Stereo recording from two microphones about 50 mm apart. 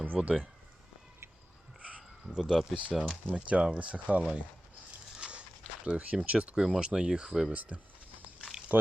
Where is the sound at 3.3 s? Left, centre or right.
Right.